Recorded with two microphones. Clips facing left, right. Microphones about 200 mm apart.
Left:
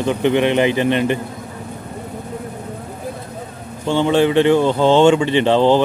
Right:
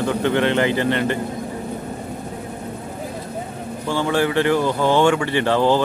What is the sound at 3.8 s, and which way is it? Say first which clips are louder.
Speech: left 5 dB; 20° left (ahead or behind).